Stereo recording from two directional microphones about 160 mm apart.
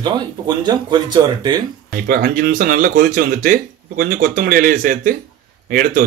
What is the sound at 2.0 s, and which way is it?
Speech, 65° right (ahead or behind).